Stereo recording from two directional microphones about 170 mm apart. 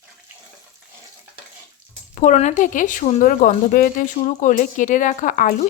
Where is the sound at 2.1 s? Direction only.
45° left (ahead or behind).